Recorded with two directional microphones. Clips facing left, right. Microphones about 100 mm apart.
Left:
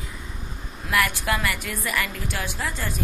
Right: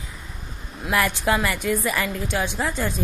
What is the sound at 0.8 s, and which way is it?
A woman's voice, 25° right (ahead or behind).